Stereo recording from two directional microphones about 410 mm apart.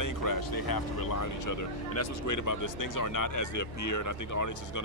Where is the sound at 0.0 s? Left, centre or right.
Left.